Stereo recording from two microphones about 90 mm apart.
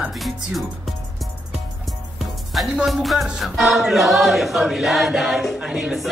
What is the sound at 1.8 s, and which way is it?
Music, centre (ahead or behind).